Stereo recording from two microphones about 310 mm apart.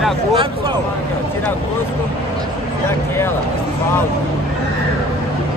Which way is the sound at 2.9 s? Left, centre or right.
Centre.